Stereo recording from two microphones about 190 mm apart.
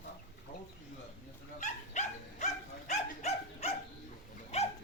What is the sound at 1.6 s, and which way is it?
Dog, 40° left (ahead or behind).